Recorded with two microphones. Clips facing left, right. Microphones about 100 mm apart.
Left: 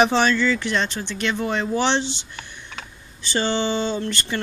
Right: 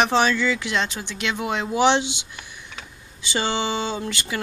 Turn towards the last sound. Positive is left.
turn(degrees=-5)  # may be behind; listen again after turning